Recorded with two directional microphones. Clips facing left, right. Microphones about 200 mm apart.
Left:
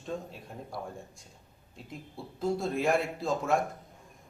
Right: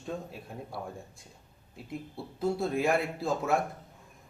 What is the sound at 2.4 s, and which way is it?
Speech, 5° right (ahead or behind).